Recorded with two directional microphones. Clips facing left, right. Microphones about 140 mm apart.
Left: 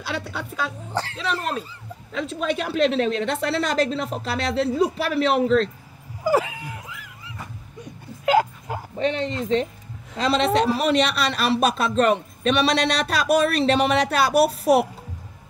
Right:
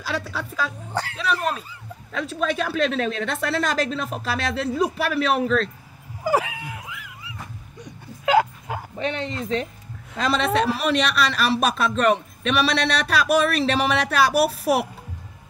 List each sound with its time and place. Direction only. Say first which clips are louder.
0.0 s a woman's voice: right 1 dB; 25° left (ahead or behind)
9.0 s a woman's voice: left 4 dB; 35° left (ahead or behind)